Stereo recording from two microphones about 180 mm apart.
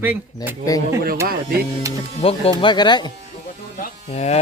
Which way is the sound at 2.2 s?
30° left (ahead or behind).